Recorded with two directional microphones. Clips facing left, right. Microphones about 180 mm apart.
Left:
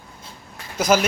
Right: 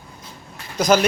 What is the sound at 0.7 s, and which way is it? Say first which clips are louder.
Speech: right 2 dB; 5° left (ahead or behind).